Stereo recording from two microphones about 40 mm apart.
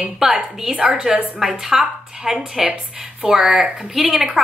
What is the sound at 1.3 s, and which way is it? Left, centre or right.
A woman's voice, centre.